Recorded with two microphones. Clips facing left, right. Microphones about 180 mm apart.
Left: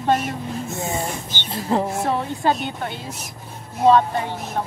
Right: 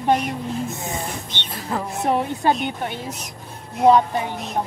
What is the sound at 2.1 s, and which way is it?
Speech, 20° right (ahead or behind).